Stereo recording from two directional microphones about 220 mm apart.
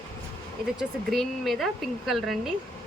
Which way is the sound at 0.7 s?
Centre (ahead or behind).